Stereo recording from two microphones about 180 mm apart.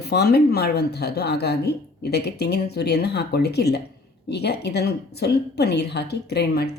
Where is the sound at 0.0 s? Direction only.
65° left (ahead or behind).